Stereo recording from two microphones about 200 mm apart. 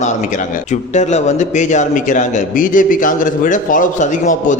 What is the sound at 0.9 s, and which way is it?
A man's voice, 35° left (ahead or behind).